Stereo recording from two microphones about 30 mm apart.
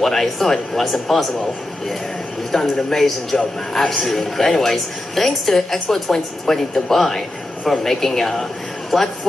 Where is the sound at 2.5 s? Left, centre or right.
Centre.